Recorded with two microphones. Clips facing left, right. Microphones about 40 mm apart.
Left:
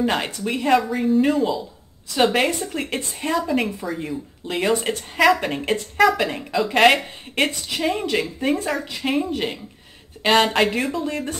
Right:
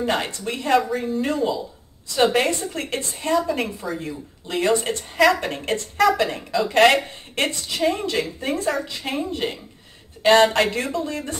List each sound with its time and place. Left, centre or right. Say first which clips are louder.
0.0 s speech: left 1 dB; centre